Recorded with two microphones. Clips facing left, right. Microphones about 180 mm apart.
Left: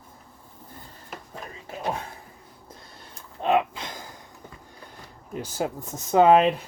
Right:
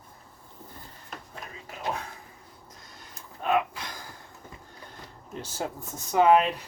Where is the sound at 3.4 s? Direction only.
25° left (ahead or behind).